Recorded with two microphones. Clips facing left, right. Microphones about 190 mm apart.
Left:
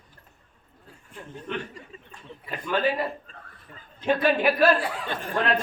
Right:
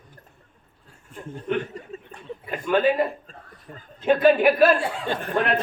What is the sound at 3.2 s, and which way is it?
Chuckle, 40° right (ahead or behind).